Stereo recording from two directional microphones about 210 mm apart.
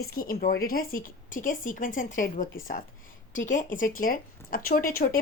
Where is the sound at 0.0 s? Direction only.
45° left (ahead or behind).